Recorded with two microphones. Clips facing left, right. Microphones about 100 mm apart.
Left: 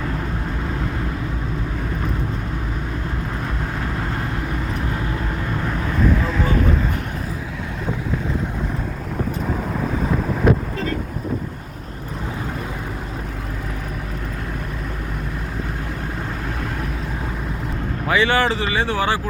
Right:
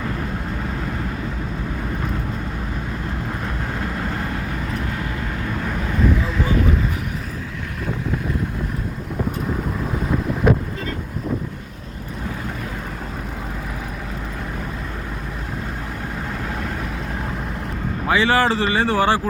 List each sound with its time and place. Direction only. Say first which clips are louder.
18.1 s speech: right 1 dB; 30° right (ahead or behind)